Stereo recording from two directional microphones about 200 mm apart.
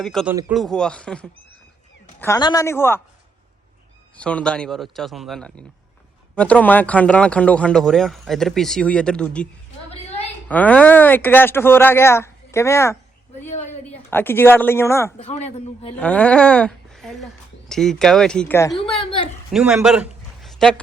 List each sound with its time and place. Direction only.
0.0 s a man's voice: centre (ahead or behind)
0.3 s a man's voice: 10° right (ahead or behind)
2.2 s speech: 15° left (ahead or behind)
4.2 s a man's voice: 5° left (ahead or behind)
10.5 s speech: 5° left (ahead or behind)
15.2 s a man's voice: 35° left (ahead or behind)
16.0 s a man's voice: 5° left (ahead or behind)
19.5 s a man's voice: 5° right (ahead or behind)